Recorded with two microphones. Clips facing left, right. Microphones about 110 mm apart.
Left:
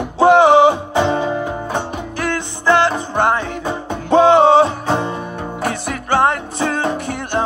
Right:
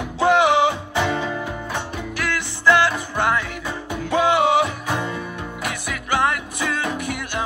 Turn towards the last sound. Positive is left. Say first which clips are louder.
# left 6 dB
turn(degrees=30)  # may be behind; listen again after turning